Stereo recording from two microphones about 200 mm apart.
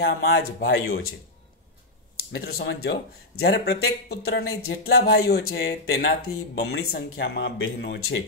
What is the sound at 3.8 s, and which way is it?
Speech, 90° left.